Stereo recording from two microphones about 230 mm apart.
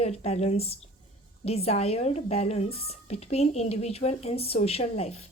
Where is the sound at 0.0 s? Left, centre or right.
Left.